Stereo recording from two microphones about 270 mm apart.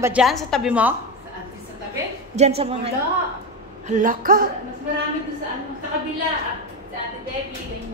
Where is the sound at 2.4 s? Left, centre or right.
Right.